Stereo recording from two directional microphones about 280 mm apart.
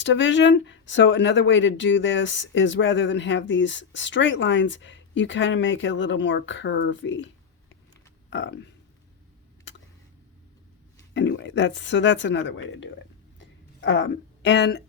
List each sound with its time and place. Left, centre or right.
0.0 s speech: left
11.1 s speech: left